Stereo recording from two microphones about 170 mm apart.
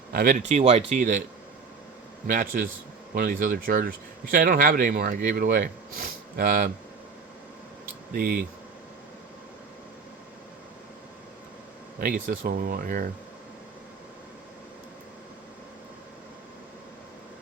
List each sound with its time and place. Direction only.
0.1 s speech: 60° right (ahead or behind)
2.2 s speech: 55° right (ahead or behind)
8.1 s speech: 60° right (ahead or behind)
11.9 s speech: 55° right (ahead or behind)